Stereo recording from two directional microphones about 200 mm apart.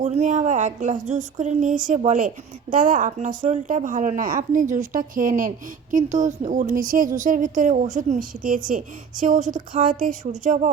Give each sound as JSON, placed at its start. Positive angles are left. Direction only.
{"t": 0.0, "sound": "a woman's voice", "side_deg": -35}